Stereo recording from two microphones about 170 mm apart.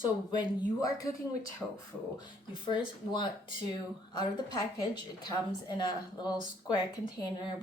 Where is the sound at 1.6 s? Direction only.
Centre (ahead or behind).